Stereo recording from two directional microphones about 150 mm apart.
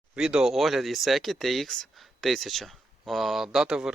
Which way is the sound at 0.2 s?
5° right (ahead or behind).